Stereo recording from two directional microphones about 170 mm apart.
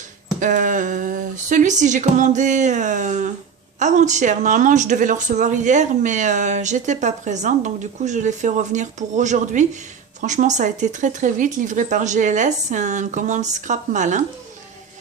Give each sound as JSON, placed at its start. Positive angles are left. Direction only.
{"t": 0.3, "sound": "speech", "side_deg": -50}